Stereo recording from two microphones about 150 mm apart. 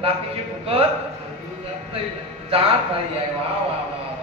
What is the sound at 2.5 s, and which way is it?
Speech, 40° right (ahead or behind).